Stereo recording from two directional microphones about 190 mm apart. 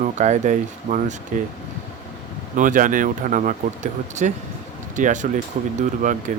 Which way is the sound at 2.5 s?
45° right (ahead or behind).